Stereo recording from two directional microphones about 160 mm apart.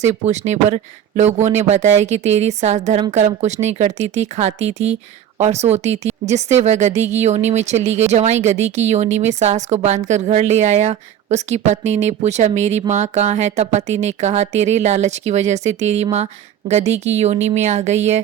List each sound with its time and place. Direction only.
0.0 s speech: 45° right (ahead or behind)